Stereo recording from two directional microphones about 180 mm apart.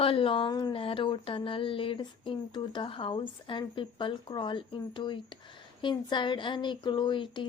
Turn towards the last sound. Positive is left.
turn(degrees=25)  # may be behind; listen again after turning